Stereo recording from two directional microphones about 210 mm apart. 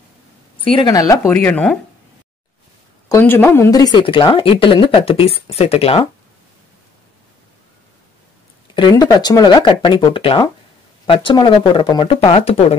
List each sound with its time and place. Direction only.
0.6 s speech: 25° left (ahead or behind); by 1.8 s 5° left (ahead or behind)
3.1 s speech: 10° left (ahead or behind); by 6.0 s 30° left (ahead or behind)
8.7 s speech: 20° left (ahead or behind)